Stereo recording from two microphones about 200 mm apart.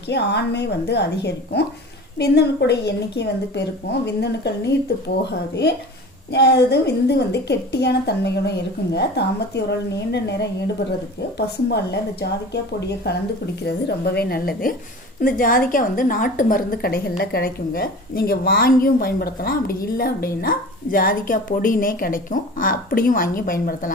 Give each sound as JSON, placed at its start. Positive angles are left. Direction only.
{"t": 0.1, "sound": "a woman's voice", "side_deg": 55}